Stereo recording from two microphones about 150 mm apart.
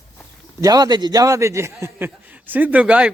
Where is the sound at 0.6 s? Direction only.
25° right (ahead or behind).